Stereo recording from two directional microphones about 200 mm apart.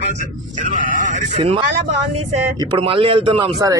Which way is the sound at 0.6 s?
40° right (ahead or behind).